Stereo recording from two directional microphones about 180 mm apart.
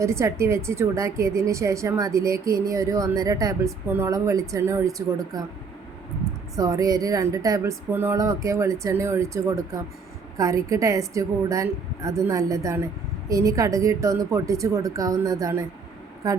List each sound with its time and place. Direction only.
0.0 s a woman's voice: 15° right (ahead or behind)
6.6 s a woman's voice: 20° right (ahead or behind)